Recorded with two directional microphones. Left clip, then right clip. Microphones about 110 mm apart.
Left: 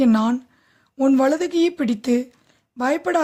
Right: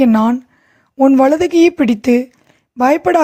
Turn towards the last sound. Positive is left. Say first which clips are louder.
# right 9 dB
turn(degrees=-45)  # may be behind; listen again after turning